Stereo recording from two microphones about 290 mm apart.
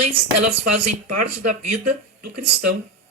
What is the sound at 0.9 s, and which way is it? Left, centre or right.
A man's voice, right.